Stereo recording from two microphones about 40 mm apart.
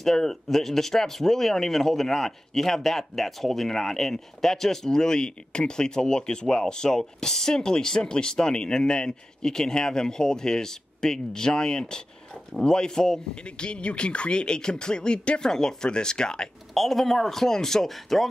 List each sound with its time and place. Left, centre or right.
0.0 s speech: centre
16.7 s speech: centre